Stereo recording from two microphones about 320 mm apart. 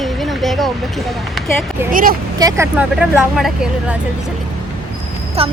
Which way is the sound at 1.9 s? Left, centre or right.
Right.